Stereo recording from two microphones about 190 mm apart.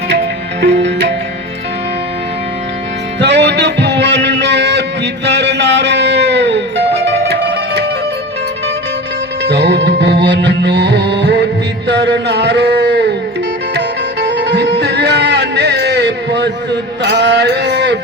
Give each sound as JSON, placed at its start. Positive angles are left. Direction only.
{"t": 0.1, "sound": "music", "side_deg": -60}
{"t": 3.2, "sound": "music", "side_deg": -65}
{"t": 9.4, "sound": "music", "side_deg": -65}
{"t": 11.9, "sound": "a sound", "side_deg": -65}
{"t": 13.7, "sound": "music", "side_deg": -65}
{"t": 17.0, "sound": "a sound", "side_deg": -65}